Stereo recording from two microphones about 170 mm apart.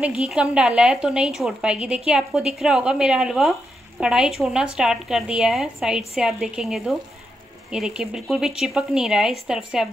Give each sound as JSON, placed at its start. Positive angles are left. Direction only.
{"t": 0.0, "sound": "a woman's voice", "side_deg": -5}